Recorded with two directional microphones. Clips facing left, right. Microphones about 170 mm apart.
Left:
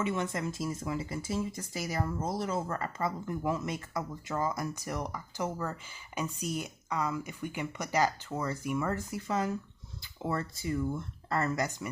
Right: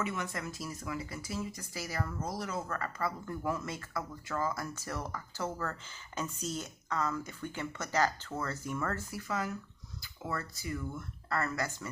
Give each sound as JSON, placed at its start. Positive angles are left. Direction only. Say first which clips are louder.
{"t": 0.0, "sound": "speech", "louder": "left 5 dB", "side_deg": 25}